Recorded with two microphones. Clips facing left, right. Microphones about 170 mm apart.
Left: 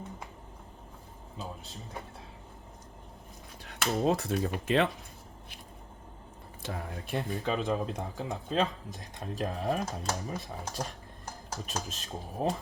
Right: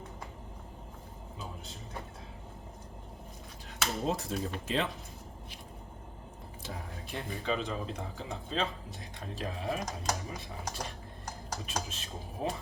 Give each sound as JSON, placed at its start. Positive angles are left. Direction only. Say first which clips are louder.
{"t": 3.7, "sound": "speech", "louder": "left 5 dB", "side_deg": 65}
{"t": 6.6, "sound": "speech", "louder": "left 5 dB", "side_deg": 55}
{"t": 11.6, "sound": "speech", "louder": "left 1 dB", "side_deg": 40}